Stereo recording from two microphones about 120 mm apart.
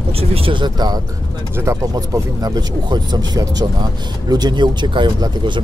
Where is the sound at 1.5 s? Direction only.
25° right (ahead or behind).